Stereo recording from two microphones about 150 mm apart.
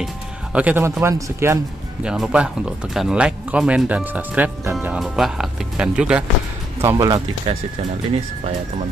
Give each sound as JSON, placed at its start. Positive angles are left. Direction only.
{"t": 0.0, "sound": "speech", "side_deg": -10}
{"t": 2.0, "sound": "speech", "side_deg": -5}
{"t": 6.8, "sound": "speech", "side_deg": -20}
{"t": 7.5, "sound": "speech", "side_deg": -40}